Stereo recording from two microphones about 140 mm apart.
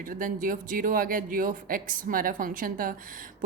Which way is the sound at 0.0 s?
75° right (ahead or behind).